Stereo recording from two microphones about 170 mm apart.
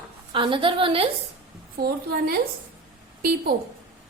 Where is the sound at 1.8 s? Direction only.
65° right (ahead or behind).